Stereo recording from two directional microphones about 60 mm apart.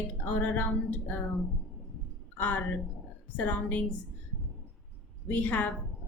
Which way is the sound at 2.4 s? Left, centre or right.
Left.